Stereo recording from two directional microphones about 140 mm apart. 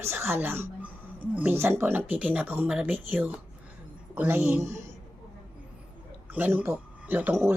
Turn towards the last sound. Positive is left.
turn(degrees=-10)  # may be behind; listen again after turning